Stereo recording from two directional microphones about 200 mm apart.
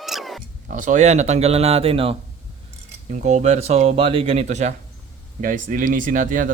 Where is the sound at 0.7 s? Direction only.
40° right (ahead or behind).